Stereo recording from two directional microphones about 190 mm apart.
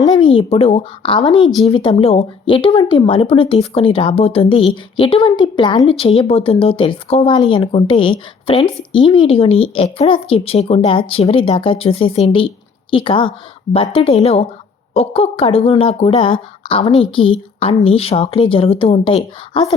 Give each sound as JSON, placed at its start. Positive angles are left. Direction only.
{"t": 0.0, "sound": "a woman's voice", "side_deg": 25}